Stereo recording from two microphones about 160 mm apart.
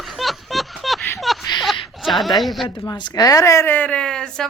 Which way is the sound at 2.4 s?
Centre (ahead or behind).